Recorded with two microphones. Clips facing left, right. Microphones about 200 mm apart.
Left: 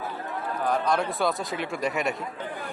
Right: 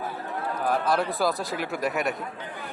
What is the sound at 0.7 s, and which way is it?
A man's voice, 5° right (ahead or behind).